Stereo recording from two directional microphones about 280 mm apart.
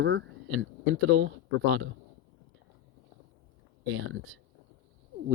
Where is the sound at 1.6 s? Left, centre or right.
Right.